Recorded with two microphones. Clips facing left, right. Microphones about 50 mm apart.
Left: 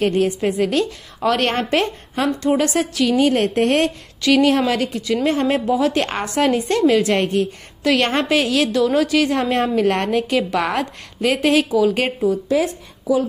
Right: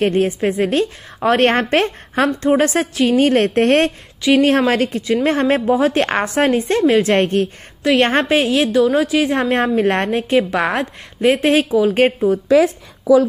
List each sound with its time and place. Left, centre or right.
0.0 s a woman's voice: right
2.4 s a woman's voice: right
4.3 s a woman's voice: right
8.7 s a woman's voice: centre
9.3 s a woman's voice: right